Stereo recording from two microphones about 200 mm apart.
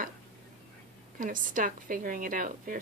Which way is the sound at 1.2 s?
40° right (ahead or behind).